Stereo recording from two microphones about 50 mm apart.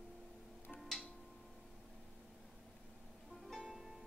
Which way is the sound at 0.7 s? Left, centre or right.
Centre.